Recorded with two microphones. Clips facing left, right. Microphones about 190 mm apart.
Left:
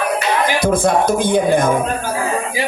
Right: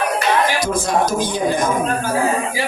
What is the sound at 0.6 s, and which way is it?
Speech, 55° left (ahead or behind).